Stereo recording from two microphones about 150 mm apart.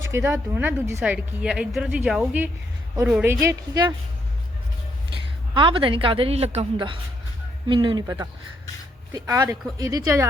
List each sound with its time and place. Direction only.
0.1 s a woman's voice: 15° right (ahead or behind)
5.1 s a woman's voice: 35° right (ahead or behind)